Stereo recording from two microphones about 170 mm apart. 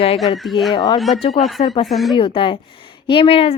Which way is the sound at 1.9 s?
Centre (ahead or behind).